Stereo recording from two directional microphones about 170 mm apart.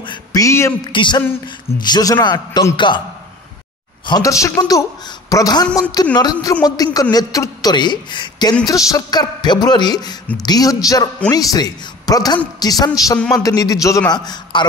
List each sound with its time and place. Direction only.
0.0 s a sound: 25° left (ahead or behind)
0.9 s a woman's voice: 25° left (ahead or behind)
4.0 s a woman's voice: 20° left (ahead or behind)